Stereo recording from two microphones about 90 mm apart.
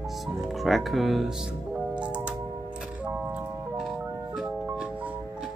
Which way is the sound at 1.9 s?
15° right (ahead or behind).